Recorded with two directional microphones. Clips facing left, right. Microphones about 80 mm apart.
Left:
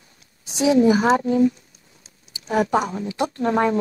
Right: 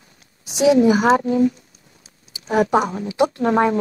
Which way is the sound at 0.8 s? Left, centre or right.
Right.